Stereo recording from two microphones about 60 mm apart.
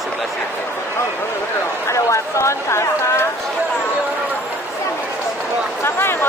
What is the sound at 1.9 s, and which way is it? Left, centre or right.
Speech, left.